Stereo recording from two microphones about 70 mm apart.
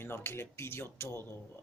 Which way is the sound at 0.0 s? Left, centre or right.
Left.